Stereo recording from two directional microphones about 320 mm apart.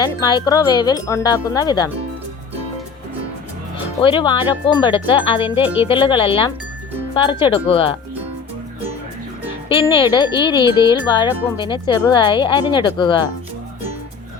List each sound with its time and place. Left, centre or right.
0.0 s speech: centre
4.0 s speech: centre
9.6 s speech: centre